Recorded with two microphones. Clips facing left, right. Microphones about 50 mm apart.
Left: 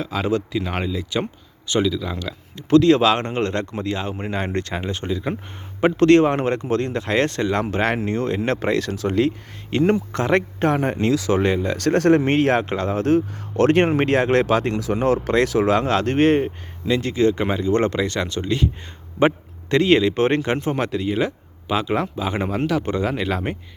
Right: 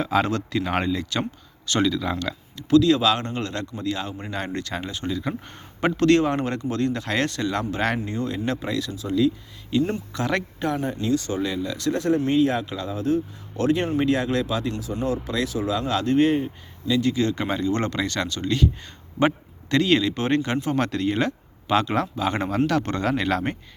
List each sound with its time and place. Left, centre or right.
0.0 s speech: centre
0.3 s speech: centre
0.6 s speech: centre
2.6 s speech: left
8.0 s speech: left
8.9 s speech: left
9.7 s speech: left
10.9 s speech: left
11.4 s speech: left
14.8 s speech: left
15.8 s speech: left
16.8 s speech: left
19.7 s speech: left
20.7 s speech: centre